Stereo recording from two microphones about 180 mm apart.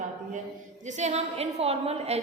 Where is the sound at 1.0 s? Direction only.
40° right (ahead or behind).